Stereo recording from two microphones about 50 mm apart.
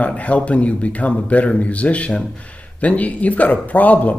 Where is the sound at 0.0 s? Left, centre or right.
Left.